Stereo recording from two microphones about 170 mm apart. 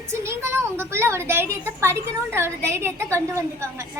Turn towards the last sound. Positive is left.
turn(degrees=-15)  # may be behind; listen again after turning